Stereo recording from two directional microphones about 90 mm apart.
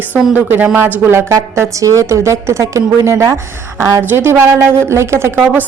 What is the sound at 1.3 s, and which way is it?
A woman's voice, 35° right (ahead or behind).